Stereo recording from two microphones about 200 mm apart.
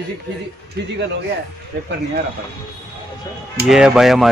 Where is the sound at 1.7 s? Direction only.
55° right (ahead or behind).